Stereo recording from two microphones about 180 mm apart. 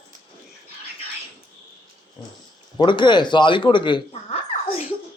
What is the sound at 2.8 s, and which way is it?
Speech, 25° left (ahead or behind).